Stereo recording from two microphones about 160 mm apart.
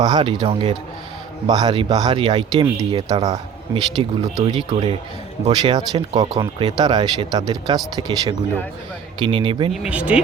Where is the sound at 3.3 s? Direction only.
35° right (ahead or behind).